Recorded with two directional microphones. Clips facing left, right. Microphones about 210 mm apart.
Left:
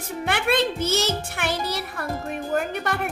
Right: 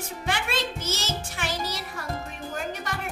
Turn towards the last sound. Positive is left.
turn(degrees=60)  # may be behind; listen again after turning